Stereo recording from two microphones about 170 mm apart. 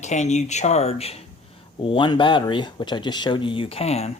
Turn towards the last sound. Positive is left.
turn(degrees=40)  # may be behind; listen again after turning